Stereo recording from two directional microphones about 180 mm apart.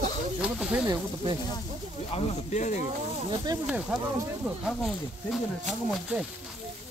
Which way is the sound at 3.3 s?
20° right (ahead or behind).